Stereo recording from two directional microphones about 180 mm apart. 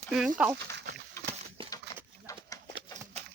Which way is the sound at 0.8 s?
65° right (ahead or behind).